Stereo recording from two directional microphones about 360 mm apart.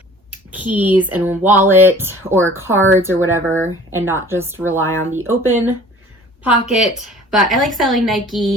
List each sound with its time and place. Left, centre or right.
0.3 s a woman's voice: centre